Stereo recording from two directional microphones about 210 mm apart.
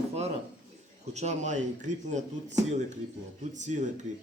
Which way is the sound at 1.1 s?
35° right (ahead or behind).